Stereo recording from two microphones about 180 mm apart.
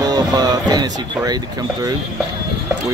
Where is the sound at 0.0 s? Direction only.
20° right (ahead or behind).